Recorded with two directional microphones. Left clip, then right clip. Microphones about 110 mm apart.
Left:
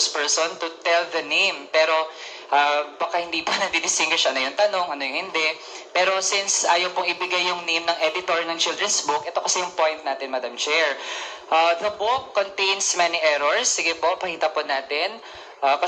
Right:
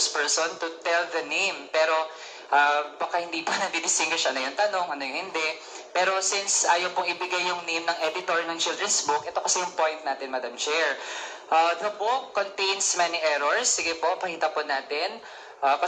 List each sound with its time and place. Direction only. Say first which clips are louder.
0.1 s a man's voice: left 3 dB; 20° left (ahead or behind)